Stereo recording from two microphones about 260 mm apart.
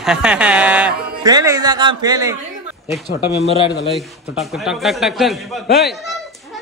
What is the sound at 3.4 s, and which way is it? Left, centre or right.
Speech, left.